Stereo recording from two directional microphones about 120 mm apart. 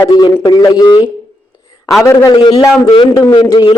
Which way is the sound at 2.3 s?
40° left (ahead or behind).